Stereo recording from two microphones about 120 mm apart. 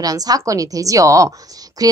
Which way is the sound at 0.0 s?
30° right (ahead or behind).